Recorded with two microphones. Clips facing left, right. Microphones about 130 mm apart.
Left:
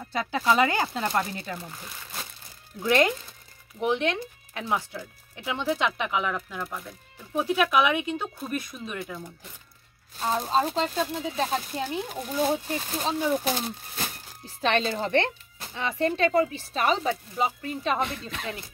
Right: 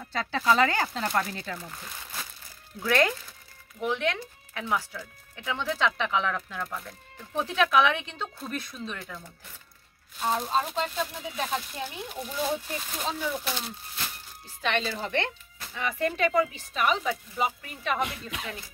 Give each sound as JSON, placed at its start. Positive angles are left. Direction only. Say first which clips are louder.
{"t": 0.0, "sound": "speech", "louder": "left 1 dB", "side_deg": 15}
{"t": 2.8, "sound": "speech", "louder": "left 2 dB", "side_deg": 20}
{"t": 10.1, "sound": "speech", "louder": "left 2 dB", "side_deg": 35}
{"t": 12.6, "sound": "speech", "louder": "left 4 dB", "side_deg": 35}
{"t": 14.6, "sound": "speech", "louder": "left 4 dB", "side_deg": 35}